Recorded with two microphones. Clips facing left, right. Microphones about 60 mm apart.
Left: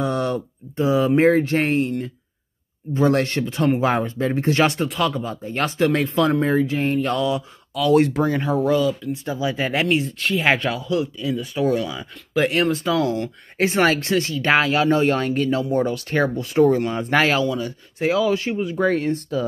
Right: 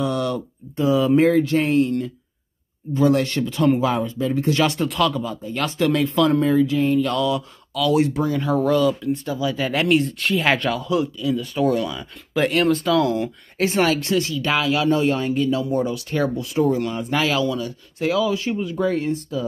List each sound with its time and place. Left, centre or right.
0.0 s speech: left
3.1 s speech: left
3.8 s speech: left
7.1 s speech: left
7.9 s speech: left
8.6 s speech: centre
9.2 s speech: left
9.7 s speech: centre
11.3 s speech: centre
13.6 s speech: left
17.4 s speech: left
18.9 s speech: left